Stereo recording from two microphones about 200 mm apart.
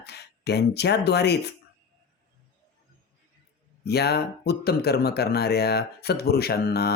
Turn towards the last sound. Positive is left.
turn(degrees=50)  # may be behind; listen again after turning